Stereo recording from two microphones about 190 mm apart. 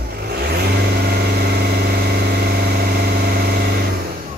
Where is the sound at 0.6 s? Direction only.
55° right (ahead or behind).